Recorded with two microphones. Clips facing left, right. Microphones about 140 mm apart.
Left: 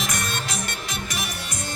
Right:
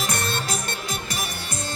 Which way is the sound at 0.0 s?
30° right (ahead or behind).